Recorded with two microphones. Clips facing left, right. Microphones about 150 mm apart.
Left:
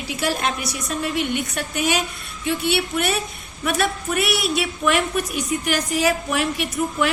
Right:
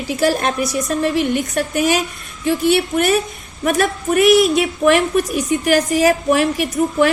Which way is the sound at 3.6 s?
45° right (ahead or behind).